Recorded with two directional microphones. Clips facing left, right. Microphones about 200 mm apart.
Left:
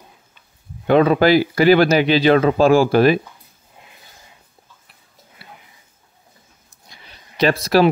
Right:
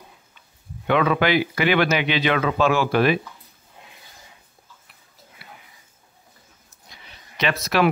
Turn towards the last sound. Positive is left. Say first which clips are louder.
# left 6 dB
turn(degrees=35)  # may be behind; listen again after turning